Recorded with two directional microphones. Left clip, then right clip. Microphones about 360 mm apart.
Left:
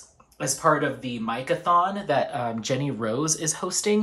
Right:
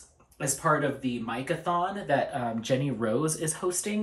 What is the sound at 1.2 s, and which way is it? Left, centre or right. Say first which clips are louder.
Speech: left 8 dB; centre.